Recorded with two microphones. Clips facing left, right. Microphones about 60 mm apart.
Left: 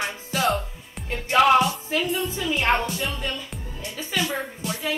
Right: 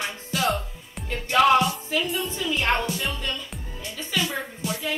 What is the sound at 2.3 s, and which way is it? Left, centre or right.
Speech, centre.